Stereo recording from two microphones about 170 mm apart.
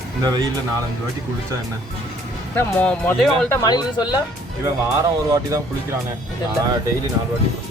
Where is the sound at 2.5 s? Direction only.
10° left (ahead or behind).